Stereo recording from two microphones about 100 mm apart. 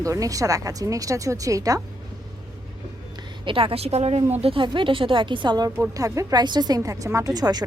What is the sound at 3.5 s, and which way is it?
Speech, 65° right (ahead or behind).